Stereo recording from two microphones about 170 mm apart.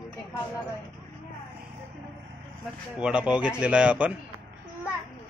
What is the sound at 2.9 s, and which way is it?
Speech, 5° right (ahead or behind).